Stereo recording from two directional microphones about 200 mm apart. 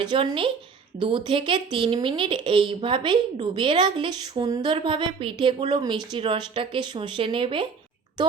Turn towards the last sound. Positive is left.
turn(degrees=-25)  # may be behind; listen again after turning